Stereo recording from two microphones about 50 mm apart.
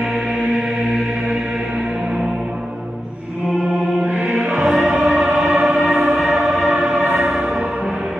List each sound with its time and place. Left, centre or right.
4.0 s music: right
4.3 s music: centre
5.0 s choir: centre
7.2 s music: centre